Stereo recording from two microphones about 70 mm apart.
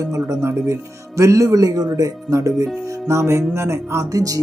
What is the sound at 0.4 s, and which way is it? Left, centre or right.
Speech, right.